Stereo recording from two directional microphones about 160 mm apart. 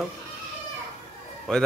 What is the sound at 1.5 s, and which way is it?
Speech, 5° left (ahead or behind).